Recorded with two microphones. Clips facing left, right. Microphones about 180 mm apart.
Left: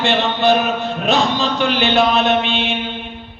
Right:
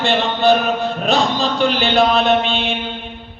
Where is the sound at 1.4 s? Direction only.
35° right (ahead or behind).